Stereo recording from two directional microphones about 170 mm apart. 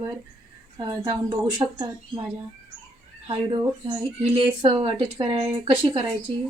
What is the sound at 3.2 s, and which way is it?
Speech, 35° right (ahead or behind).